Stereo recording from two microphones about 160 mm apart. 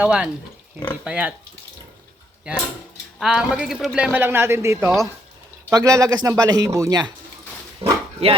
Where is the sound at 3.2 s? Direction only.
5° right (ahead or behind); by 7.1 s 20° right (ahead or behind).